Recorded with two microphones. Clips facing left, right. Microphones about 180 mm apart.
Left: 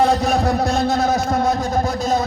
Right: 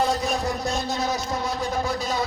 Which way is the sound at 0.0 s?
70° left (ahead or behind).